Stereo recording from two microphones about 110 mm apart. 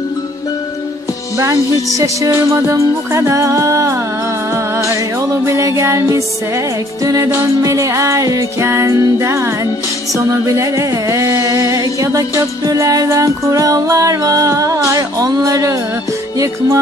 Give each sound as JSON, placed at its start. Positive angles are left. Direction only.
{"t": 1.4, "sound": "music", "side_deg": -30}